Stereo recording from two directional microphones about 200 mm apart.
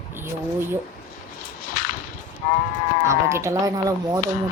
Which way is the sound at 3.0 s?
15° right (ahead or behind).